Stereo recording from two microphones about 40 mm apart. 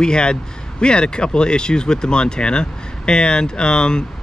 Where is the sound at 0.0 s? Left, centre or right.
Left.